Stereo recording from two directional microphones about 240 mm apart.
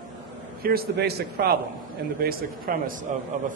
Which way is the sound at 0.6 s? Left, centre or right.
Right.